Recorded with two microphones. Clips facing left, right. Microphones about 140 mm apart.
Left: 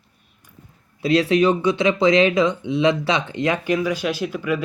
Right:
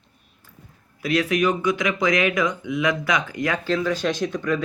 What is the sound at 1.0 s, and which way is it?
Speech, 30° left (ahead or behind).